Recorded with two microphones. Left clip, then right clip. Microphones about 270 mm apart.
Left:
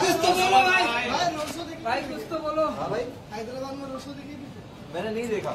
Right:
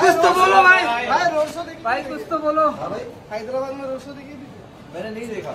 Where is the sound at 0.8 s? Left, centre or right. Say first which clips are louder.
Right 6 dB; centre.